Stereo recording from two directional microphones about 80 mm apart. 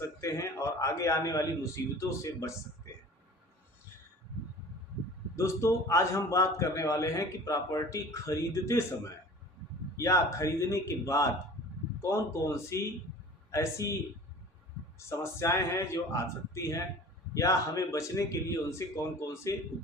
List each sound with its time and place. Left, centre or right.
0.2 s a man's voice: left
5.4 s a man's voice: left
10.0 s a man's voice: left
14.9 s a man's voice: left